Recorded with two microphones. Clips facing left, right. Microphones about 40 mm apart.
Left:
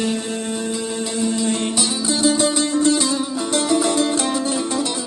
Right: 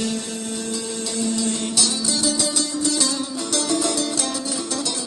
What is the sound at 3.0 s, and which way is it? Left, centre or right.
Music, left.